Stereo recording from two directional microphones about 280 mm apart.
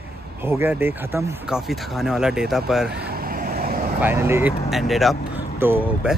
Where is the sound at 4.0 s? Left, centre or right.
Centre.